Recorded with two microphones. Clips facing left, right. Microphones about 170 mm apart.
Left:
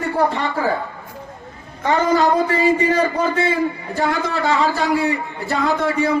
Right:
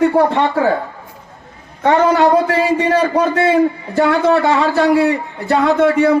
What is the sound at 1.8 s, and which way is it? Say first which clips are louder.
A man's voice: right 5 dB; 65° right (ahead or behind).